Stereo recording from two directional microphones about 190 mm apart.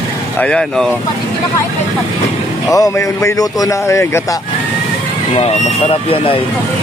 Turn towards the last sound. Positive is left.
turn(degrees=30)  # may be behind; listen again after turning